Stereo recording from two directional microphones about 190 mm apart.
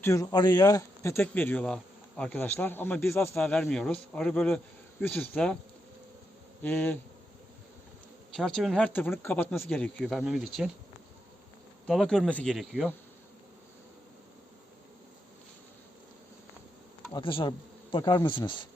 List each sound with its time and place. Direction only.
0.0 s speech: 15° left (ahead or behind)
6.6 s speech: 10° left (ahead or behind)
8.4 s speech: centre (ahead or behind)
11.9 s speech: 5° left (ahead or behind)
17.1 s a man's voice: 25° left (ahead or behind)